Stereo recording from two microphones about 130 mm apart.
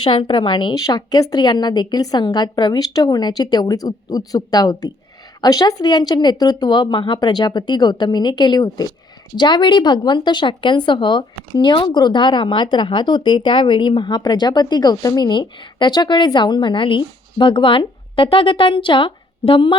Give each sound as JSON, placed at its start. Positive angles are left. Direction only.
{"t": 0.0, "sound": "speech", "side_deg": 40}